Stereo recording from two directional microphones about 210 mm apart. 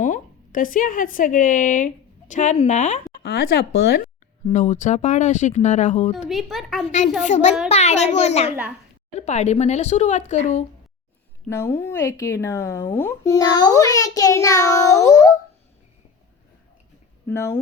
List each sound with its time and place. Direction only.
0.0 s a woman's voice: 40° left (ahead or behind)
3.2 s speech: 50° left (ahead or behind)
4.5 s speech: 35° left (ahead or behind)
6.2 s speech: centre (ahead or behind)
7.2 s speech: 35° left (ahead or behind)
11.4 s speech: 10° left (ahead or behind)
17.2 s speech: 10° left (ahead or behind)